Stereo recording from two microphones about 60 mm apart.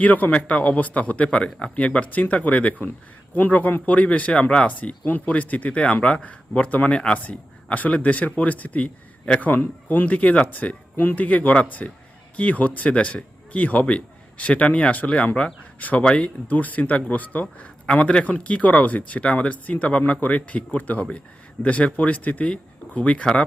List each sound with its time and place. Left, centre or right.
0.0 s speech: left
9.5 s speech: left